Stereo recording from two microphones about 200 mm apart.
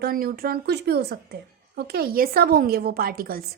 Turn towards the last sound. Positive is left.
turn(degrees=-45)  # may be behind; listen again after turning